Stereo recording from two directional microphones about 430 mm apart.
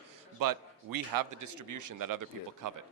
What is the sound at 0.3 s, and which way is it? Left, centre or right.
Speech, right.